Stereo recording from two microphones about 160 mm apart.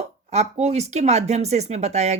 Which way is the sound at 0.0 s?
45° right (ahead or behind).